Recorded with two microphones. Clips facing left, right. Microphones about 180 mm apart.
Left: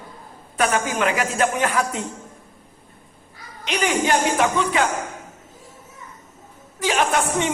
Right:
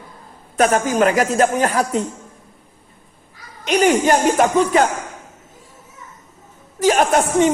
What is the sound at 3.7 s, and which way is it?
Speech, 45° right (ahead or behind).